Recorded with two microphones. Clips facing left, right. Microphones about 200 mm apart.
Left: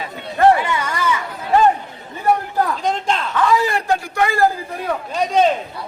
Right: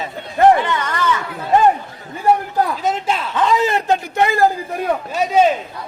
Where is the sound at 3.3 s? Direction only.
20° right (ahead or behind).